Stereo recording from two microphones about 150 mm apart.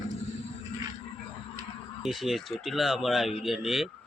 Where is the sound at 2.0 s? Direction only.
Centre (ahead or behind).